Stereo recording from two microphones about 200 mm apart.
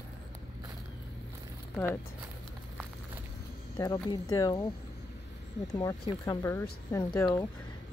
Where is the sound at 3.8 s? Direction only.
20° left (ahead or behind).